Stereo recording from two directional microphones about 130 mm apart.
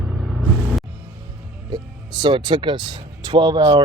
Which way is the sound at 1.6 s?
35° right (ahead or behind).